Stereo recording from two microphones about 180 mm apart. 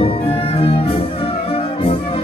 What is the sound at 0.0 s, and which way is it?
Brass instrument, 30° left (ahead or behind).